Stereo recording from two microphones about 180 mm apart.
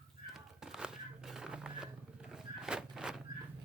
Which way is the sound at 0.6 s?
5° right (ahead or behind).